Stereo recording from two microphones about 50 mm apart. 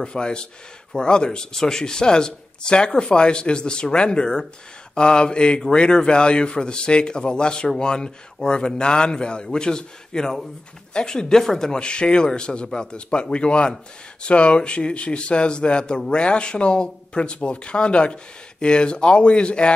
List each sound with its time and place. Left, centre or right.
0.0 s speech: centre